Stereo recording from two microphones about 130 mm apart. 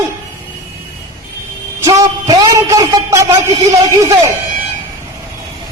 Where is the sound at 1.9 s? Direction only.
25° right (ahead or behind).